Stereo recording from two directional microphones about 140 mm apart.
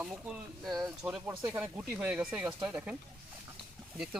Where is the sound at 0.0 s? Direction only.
5° right (ahead or behind).